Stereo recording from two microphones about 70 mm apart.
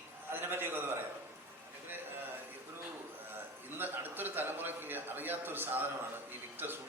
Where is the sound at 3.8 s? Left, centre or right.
Right.